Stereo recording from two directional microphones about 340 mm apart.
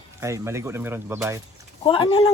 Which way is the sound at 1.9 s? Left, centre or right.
Centre.